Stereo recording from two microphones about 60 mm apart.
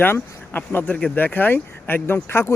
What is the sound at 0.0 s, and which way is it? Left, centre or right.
Speech, left.